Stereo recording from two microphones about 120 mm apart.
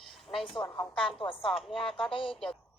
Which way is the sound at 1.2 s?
50° left (ahead or behind).